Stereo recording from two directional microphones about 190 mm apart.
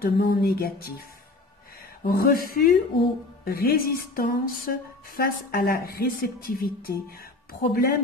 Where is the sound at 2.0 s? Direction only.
50° left (ahead or behind).